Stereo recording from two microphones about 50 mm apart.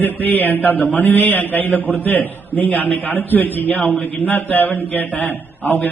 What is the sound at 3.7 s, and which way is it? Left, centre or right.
A man's voice, left.